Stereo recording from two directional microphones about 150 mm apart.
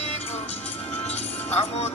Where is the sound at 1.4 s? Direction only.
45° left (ahead or behind).